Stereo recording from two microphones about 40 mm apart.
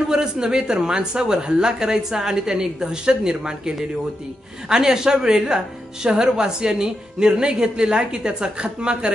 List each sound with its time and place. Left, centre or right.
0.1 s a woman's voice: centre